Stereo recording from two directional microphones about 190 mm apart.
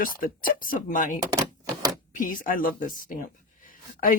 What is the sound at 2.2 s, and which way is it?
A woman's voice, 45° left (ahead or behind).